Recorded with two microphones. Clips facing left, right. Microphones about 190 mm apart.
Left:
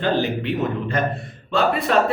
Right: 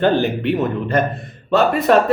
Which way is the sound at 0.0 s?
55° right (ahead or behind).